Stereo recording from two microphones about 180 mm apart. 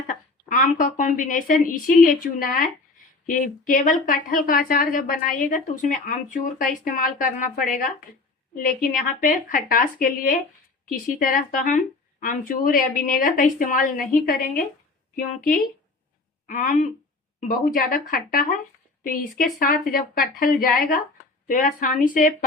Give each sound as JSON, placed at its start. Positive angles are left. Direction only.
{"t": 0.1, "sound": "a woman's voice", "side_deg": 45}
{"t": 18.1, "sound": "a woman's voice", "side_deg": 55}